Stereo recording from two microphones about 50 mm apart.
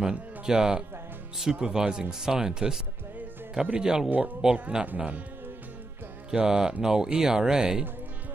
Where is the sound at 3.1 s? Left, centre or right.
Right.